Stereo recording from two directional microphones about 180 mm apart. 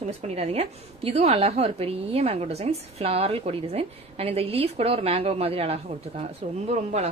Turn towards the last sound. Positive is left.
turn(degrees=-40)  # may be behind; listen again after turning